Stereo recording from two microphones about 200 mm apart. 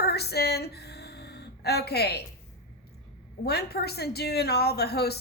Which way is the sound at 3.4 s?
55° left (ahead or behind).